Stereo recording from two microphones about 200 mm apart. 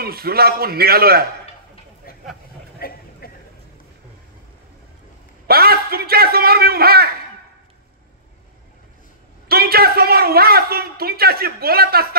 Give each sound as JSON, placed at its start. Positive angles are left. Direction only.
{"t": 0.0, "sound": "a man's voice", "side_deg": -50}
{"t": 2.1, "sound": "a sound", "side_deg": 50}
{"t": 5.5, "sound": "a man's voice", "side_deg": -50}
{"t": 9.5, "sound": "a man's voice", "side_deg": -50}